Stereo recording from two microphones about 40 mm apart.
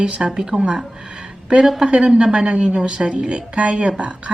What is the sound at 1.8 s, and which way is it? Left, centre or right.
Speech, right.